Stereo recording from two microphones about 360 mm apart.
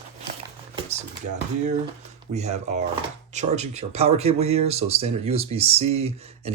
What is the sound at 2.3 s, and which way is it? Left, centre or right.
Speech, centre.